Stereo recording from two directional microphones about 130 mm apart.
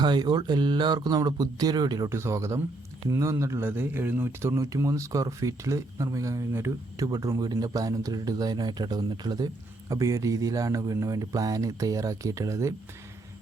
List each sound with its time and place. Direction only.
0.0 s speech: 35° right (ahead or behind)
2.0 s speech: 20° right (ahead or behind)